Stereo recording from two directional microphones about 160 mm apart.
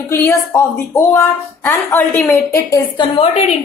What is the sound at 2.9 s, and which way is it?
Speech, 35° left (ahead or behind).